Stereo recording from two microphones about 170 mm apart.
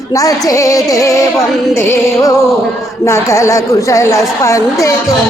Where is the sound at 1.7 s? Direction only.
15° left (ahead or behind).